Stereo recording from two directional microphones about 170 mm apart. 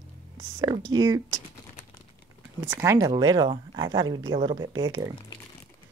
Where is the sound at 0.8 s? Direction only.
20° right (ahead or behind).